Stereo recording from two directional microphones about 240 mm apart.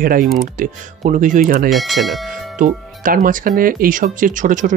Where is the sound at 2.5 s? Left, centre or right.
Right.